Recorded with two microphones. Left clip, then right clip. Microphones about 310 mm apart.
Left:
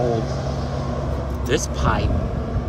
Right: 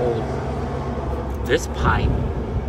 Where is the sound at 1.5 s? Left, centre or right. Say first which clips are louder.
Right 2 dB; centre.